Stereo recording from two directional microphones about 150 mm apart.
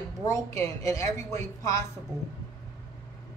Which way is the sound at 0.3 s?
20° left (ahead or behind).